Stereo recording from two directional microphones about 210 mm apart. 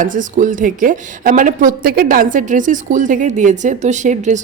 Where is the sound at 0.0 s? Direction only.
40° right (ahead or behind).